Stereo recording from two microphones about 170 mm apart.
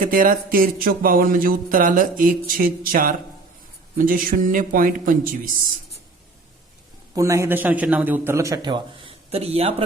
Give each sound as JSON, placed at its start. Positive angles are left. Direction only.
{"t": 0.0, "sound": "a sound", "side_deg": -55}
{"t": 3.9, "sound": "a man's voice", "side_deg": -55}
{"t": 7.1, "sound": "a man's voice", "side_deg": -20}